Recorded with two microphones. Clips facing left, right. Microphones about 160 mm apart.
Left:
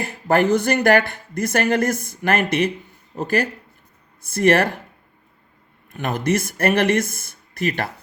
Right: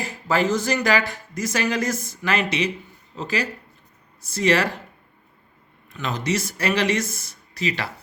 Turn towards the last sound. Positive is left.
turn(degrees=55)  # may be behind; listen again after turning